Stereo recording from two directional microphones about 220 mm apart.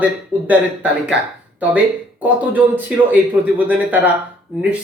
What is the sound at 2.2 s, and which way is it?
Speech, 5° right (ahead or behind).